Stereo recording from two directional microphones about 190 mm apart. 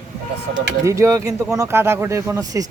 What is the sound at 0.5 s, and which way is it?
Speech, 15° right (ahead or behind).